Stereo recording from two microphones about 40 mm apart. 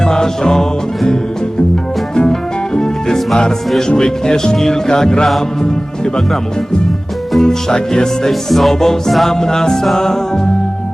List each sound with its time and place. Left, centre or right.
0.0 s music: centre
2.7 s music: centre
3.8 s speech: centre
7.3 s speech: centre